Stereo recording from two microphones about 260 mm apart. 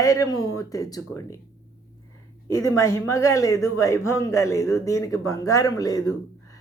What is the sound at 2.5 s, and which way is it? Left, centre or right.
A man's voice, centre.